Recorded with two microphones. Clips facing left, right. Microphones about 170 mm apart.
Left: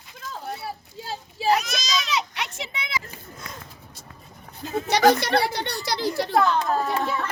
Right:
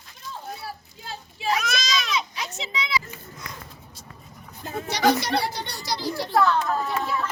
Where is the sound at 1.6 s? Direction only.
60° right (ahead or behind).